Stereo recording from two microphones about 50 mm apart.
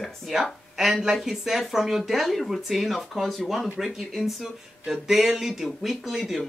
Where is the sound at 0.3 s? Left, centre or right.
Centre.